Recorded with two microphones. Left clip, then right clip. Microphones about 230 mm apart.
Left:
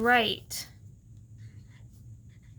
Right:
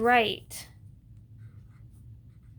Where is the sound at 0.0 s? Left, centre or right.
Centre.